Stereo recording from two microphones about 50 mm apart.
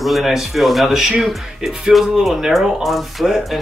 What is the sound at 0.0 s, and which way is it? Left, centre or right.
Speech, centre.